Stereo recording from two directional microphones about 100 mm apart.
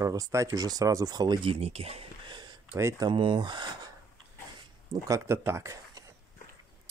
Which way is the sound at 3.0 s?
50° right (ahead or behind).